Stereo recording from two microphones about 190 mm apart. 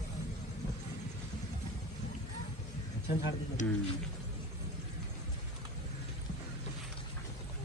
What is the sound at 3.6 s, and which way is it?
Speech, 40° left (ahead or behind).